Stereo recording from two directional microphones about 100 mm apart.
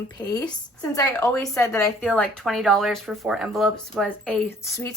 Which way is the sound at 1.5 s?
30° left (ahead or behind).